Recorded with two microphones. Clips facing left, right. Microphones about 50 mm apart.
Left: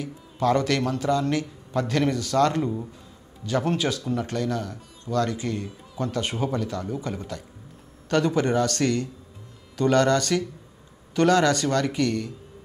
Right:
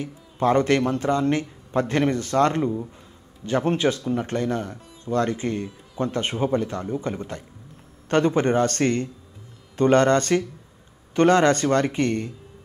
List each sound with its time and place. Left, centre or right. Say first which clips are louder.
0.0 s speech: right 2 dB; right